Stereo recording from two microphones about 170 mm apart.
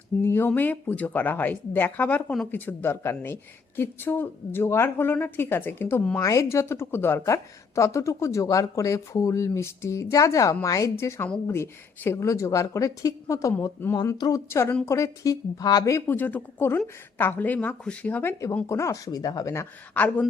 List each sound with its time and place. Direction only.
0.3 s a woman's voice: 15° left (ahead or behind)